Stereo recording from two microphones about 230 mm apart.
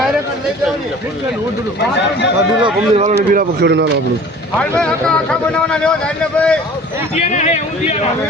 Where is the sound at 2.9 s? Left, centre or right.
Right.